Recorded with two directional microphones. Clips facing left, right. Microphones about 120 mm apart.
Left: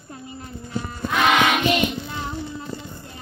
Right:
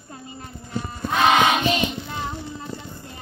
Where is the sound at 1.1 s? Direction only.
30° right (ahead or behind).